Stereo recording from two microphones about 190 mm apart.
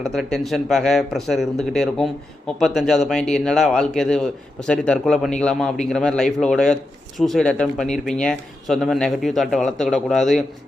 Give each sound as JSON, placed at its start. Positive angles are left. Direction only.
{"t": 0.0, "sound": "speech", "side_deg": 0}